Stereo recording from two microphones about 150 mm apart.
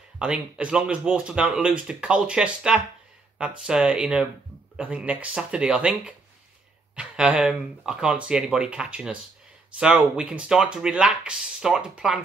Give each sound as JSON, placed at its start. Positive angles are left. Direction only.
{"t": 0.2, "sound": "speech", "side_deg": -5}